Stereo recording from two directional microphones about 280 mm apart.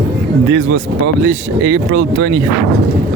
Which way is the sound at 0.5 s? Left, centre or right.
Right.